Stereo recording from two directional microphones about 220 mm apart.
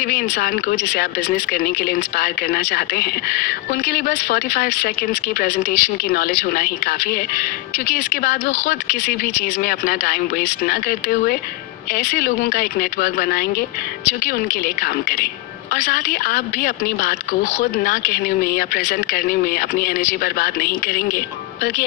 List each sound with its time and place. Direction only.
0.1 s a woman's voice: 45° left (ahead or behind)
15.7 s a woman's voice: 40° left (ahead or behind)